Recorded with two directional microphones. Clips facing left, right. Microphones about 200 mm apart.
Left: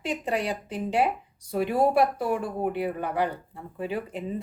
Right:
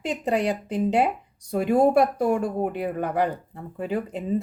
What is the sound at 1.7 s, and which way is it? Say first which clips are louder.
Speech: right 4 dB; 45° right (ahead or behind).